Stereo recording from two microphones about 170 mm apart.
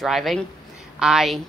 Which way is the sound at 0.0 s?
Centre (ahead or behind).